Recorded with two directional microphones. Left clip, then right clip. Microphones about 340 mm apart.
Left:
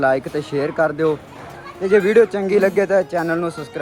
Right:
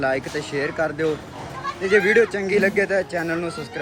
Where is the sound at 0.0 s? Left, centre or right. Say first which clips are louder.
Left 5 dB; centre.